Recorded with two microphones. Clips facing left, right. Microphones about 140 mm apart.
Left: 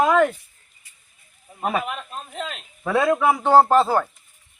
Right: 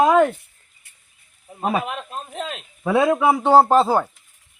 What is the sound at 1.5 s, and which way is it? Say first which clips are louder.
Speech: right 2 dB; 10° right (ahead or behind).